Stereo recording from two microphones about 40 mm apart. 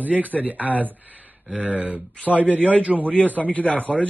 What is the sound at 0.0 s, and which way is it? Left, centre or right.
Speech, right.